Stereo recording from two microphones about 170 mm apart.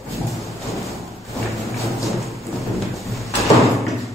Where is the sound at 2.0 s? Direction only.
Centre (ahead or behind).